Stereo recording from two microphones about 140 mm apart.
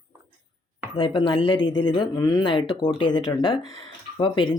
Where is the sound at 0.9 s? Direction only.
35° left (ahead or behind).